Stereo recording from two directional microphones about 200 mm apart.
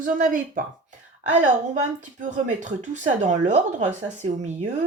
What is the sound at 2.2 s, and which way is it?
Speech, 40° right (ahead or behind).